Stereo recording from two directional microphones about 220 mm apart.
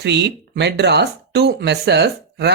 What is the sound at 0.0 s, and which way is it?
Speech, 50° right (ahead or behind).